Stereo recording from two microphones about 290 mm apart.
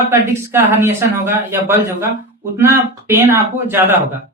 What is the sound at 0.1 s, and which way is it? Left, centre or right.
Speech, centre.